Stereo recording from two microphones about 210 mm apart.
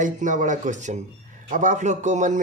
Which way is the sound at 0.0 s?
35° right (ahead or behind).